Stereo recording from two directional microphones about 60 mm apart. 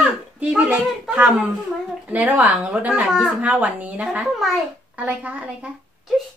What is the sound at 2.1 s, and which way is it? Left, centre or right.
A child's voice, right.